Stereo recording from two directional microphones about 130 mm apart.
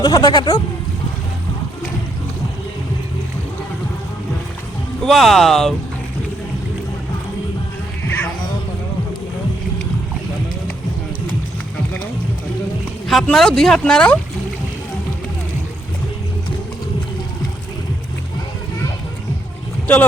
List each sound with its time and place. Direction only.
0.0 s speech: 35° left (ahead or behind)
5.0 s speech: centre (ahead or behind)
8.0 s music: 15° left (ahead or behind)
13.1 s speech: centre (ahead or behind)